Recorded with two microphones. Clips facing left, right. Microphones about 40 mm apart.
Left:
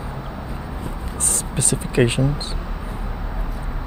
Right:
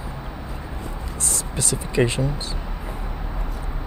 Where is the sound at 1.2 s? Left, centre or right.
Left.